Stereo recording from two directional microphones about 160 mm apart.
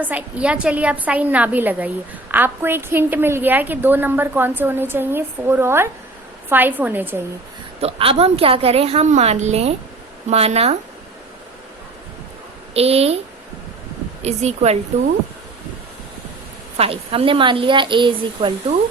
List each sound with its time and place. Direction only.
0.0 s a woman's voice: 10° right (ahead or behind)
7.8 s a woman's voice: 35° right (ahead or behind)
12.7 s a woman's voice: 40° right (ahead or behind)
14.2 s speech: 45° right (ahead or behind)
16.7 s a woman's voice: 35° right (ahead or behind)